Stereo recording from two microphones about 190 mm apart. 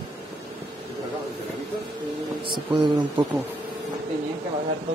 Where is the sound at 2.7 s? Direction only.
25° right (ahead or behind).